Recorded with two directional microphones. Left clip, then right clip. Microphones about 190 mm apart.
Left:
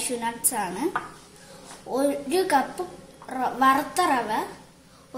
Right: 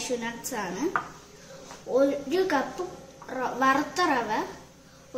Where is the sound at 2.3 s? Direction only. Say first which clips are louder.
Left 3 dB; 40° left (ahead or behind).